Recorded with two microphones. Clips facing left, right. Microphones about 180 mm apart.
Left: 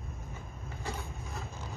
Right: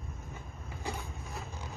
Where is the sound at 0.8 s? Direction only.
15° right (ahead or behind).